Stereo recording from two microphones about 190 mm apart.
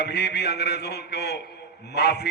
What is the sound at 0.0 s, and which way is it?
A man's voice, 60° left (ahead or behind).